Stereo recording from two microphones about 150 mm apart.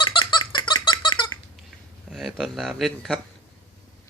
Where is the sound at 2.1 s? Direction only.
Centre (ahead or behind).